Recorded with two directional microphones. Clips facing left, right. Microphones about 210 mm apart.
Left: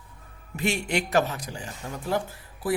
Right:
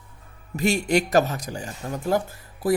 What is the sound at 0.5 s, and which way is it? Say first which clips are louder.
Speech: right 5 dB; 40° right (ahead or behind).